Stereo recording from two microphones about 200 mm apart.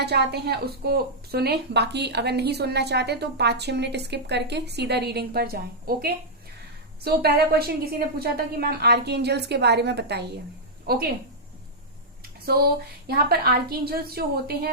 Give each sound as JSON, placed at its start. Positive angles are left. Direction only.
{"t": 0.0, "sound": "a woman's voice", "side_deg": -55}
{"t": 13.1, "sound": "a woman's voice", "side_deg": -50}